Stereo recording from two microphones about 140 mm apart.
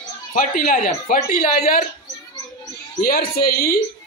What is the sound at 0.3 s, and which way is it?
Speech, 70° left (ahead or behind).